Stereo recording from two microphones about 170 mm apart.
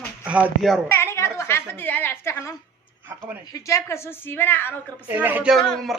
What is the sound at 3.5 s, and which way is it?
A woman's voice, 20° left (ahead or behind).